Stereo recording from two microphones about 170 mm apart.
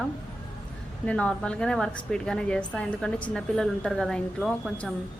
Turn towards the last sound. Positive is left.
turn(degrees=5)  # may be behind; listen again after turning